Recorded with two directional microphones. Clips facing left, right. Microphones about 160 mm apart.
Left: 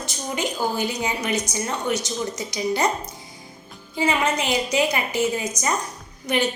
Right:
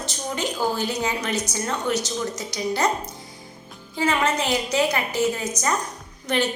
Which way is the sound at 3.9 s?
10° left (ahead or behind).